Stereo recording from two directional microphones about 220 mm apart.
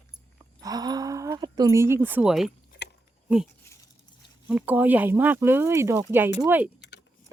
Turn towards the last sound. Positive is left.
turn(degrees=50)  # may be behind; listen again after turning